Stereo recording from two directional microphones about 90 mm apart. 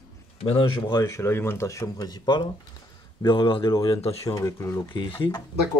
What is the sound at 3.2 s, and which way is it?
Speech, 70° left (ahead or behind).